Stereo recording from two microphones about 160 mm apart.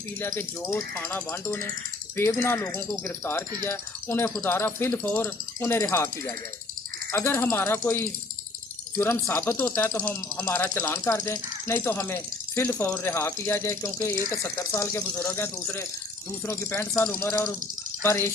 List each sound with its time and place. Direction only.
0.2 s speech: 15° left (ahead or behind)